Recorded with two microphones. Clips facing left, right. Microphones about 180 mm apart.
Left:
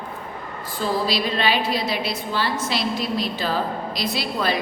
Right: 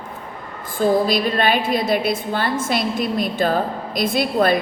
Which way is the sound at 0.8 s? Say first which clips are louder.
Right 6 dB; 50° right (ahead or behind).